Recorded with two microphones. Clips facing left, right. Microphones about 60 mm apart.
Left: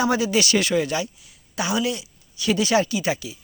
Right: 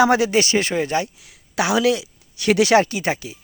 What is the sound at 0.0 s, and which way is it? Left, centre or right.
Speech, right.